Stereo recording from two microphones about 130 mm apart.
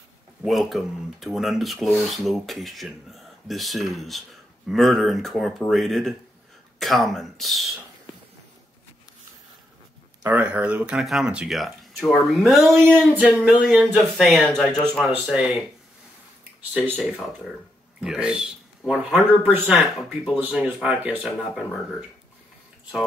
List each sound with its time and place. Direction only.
0.4 s speech: centre (ahead or behind)
10.2 s speech: 10° right (ahead or behind)
16.7 s speech: 10° right (ahead or behind)
21.2 s speech: centre (ahead or behind)